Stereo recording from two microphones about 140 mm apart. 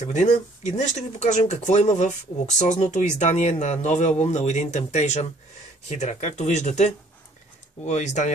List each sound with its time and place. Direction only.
0.0 s speech: 60° left (ahead or behind)